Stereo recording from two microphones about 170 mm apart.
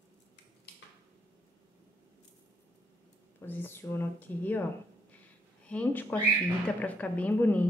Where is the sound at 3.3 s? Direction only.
15° left (ahead or behind).